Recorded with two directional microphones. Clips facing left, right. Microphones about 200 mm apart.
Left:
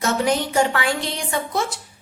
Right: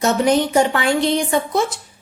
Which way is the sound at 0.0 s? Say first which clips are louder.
Right 5 dB; 20° right (ahead or behind).